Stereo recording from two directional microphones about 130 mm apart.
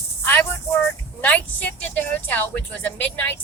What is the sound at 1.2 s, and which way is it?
Speech, 10° left (ahead or behind).